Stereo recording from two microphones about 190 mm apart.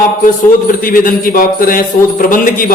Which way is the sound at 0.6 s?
45° left (ahead or behind).